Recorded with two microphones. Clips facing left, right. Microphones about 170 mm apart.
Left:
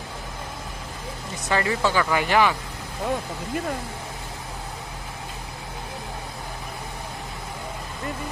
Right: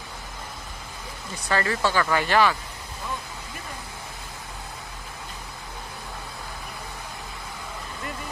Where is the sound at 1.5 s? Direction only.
15° left (ahead or behind).